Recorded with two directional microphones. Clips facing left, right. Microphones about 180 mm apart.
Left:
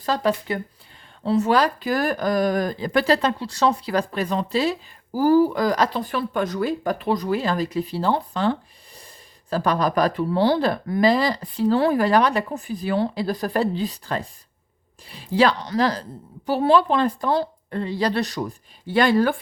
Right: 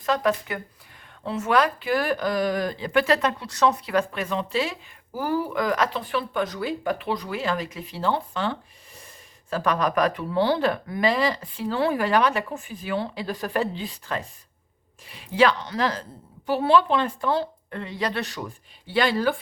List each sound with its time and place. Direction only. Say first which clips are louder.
0.0 s speech: left 1 dB; 30° left (ahead or behind); by 19.4 s 50° left (ahead or behind)